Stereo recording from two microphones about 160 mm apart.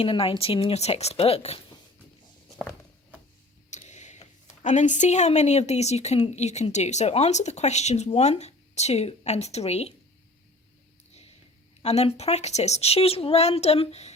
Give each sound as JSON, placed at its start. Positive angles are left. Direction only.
{"t": 0.0, "sound": "speech", "side_deg": 35}
{"t": 3.7, "sound": "a sound", "side_deg": 45}
{"t": 4.6, "sound": "speech", "side_deg": 50}
{"t": 11.8, "sound": "speech", "side_deg": 40}